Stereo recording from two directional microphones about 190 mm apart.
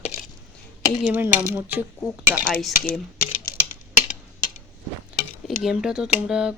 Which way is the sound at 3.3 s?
40° left (ahead or behind).